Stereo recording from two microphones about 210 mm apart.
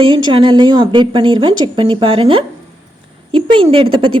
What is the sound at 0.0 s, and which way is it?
A woman's voice, 25° right (ahead or behind).